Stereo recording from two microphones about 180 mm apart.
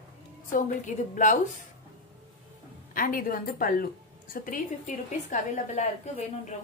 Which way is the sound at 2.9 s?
50° left (ahead or behind).